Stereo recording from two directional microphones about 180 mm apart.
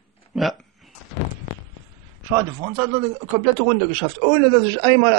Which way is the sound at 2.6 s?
30° right (ahead or behind).